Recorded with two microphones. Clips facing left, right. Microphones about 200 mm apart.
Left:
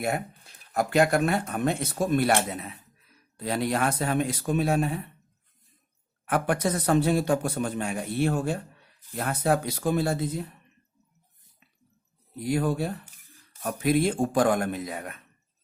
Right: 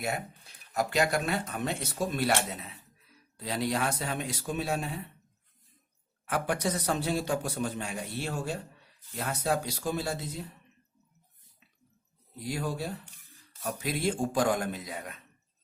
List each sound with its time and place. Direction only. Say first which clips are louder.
0.7 s a man's voice: left 5 dB; 50° left (ahead or behind)
6.2 s a man's voice: left 4 dB; 55° left (ahead or behind)
12.5 s a man's voice: left 7 dB; 55° left (ahead or behind)